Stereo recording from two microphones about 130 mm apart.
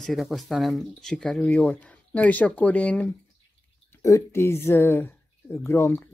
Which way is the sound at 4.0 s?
25° left (ahead or behind).